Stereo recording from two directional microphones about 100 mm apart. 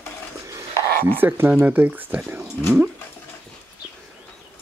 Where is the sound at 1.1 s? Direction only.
20° right (ahead or behind).